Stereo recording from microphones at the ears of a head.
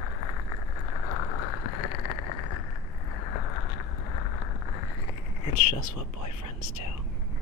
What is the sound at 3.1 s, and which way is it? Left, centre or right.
Vehicle, left.